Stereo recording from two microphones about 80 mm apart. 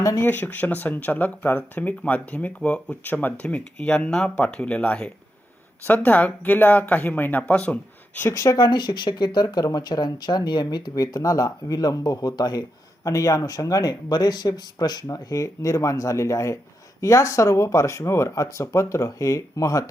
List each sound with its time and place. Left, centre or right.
0.2 s speech: left
8.3 s speech: left